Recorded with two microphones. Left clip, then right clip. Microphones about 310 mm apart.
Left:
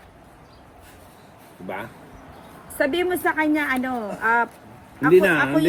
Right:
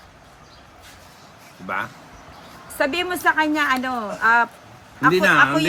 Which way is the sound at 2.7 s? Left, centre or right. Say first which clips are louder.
Even; right.